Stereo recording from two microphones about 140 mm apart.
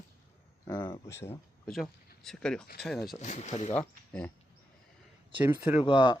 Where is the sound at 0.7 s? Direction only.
30° left (ahead or behind).